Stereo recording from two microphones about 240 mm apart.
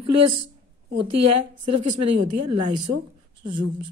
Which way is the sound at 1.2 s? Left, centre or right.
Right.